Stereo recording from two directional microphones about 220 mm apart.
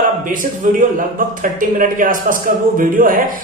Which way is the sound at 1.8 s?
40° right (ahead or behind).